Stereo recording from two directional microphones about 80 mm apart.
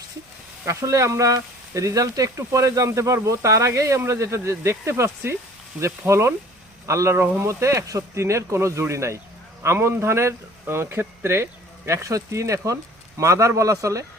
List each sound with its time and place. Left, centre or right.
0.6 s speech: right